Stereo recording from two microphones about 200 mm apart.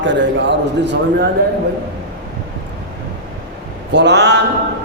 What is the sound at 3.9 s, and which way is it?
Speech, 60° right (ahead or behind).